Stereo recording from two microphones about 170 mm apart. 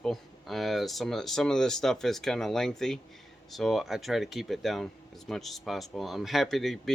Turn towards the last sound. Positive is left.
turn(degrees=0)  # may be behind; listen again after turning